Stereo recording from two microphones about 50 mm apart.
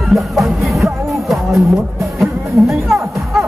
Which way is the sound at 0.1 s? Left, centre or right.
Centre.